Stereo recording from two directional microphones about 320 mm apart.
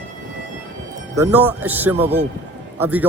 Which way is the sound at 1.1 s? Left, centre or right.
Centre.